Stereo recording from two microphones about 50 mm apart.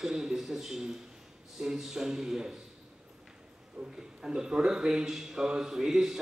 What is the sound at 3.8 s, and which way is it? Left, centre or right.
A man's voice, centre.